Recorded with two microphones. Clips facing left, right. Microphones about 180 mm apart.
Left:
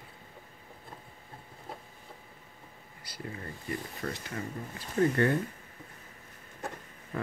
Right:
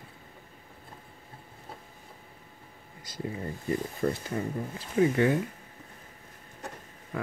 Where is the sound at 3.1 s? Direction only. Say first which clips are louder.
Right 6 dB; 20° right (ahead or behind).